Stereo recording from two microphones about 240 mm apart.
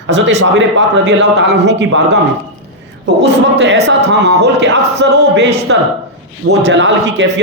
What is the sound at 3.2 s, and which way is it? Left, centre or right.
Speech, right.